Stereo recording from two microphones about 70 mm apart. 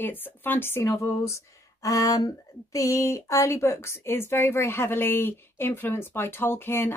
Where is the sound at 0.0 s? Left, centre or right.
Left.